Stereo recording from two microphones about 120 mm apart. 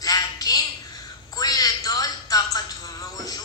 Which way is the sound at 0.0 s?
30° left (ahead or behind).